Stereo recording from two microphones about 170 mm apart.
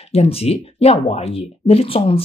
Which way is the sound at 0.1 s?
35° left (ahead or behind).